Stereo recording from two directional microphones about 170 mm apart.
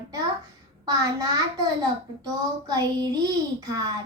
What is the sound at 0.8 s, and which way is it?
A child's voice, 20° right (ahead or behind).